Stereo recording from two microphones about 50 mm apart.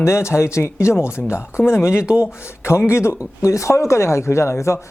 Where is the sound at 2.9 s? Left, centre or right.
Left.